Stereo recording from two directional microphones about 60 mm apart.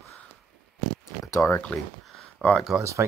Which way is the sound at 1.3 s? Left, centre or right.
Left.